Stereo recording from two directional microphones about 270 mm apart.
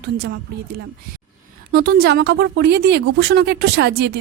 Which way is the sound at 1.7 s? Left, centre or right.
Right.